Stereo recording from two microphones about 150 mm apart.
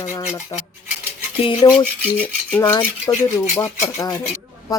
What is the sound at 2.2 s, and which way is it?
Rub, 10° left (ahead or behind).